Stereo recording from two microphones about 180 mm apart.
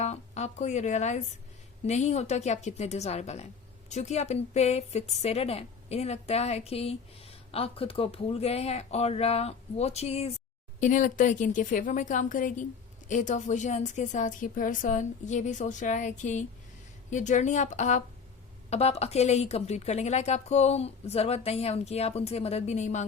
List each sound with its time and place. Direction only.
0.0 s a woman's voice: 40° left (ahead or behind)